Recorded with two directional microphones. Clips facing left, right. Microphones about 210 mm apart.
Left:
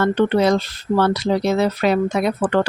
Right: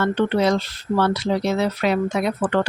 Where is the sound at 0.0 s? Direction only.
40° left (ahead or behind).